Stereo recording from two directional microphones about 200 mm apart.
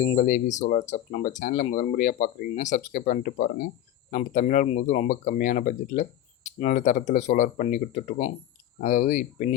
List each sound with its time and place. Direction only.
0.0 s speech: 35° left (ahead or behind)